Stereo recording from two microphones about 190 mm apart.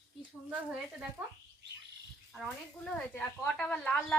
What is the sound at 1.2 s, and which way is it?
Speech, 15° right (ahead or behind).